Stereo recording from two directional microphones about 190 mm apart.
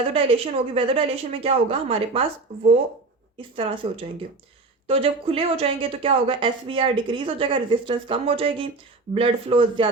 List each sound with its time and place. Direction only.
0.0 s speech: 30° right (ahead or behind)
3.3 s speech: 30° right (ahead or behind)